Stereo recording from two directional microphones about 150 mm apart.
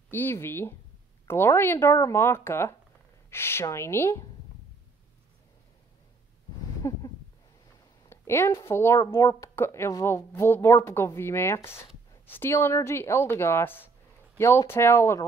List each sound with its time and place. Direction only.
0.1 s speech: 15° left (ahead or behind)
6.8 s a sound: 20° left (ahead or behind)
8.1 s speech: 20° left (ahead or behind)